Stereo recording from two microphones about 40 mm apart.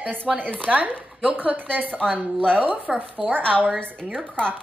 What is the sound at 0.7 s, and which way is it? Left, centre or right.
A woman's voice, right.